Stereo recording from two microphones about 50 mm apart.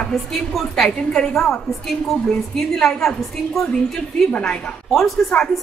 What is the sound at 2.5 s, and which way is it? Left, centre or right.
A woman's voice, centre.